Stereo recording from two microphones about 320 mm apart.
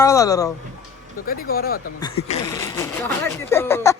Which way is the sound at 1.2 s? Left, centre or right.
Left.